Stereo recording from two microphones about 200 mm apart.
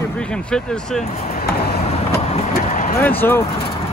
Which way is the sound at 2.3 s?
40° left (ahead or behind).